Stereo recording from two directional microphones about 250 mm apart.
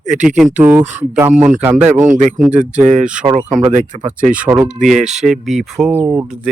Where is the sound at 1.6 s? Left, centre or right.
Centre.